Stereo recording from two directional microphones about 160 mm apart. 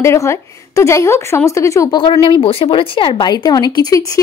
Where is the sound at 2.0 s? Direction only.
35° left (ahead or behind).